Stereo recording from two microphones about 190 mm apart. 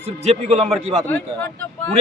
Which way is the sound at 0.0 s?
35° right (ahead or behind).